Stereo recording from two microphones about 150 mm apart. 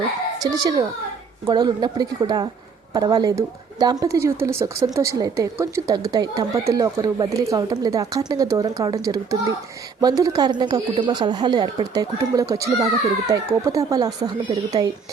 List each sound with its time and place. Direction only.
0.4 s speech: 25° right (ahead or behind)